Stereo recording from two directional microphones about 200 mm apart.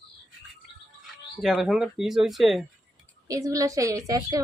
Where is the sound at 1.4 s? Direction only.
Centre (ahead or behind).